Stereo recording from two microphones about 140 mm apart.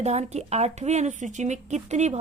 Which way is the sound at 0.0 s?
50° right (ahead or behind).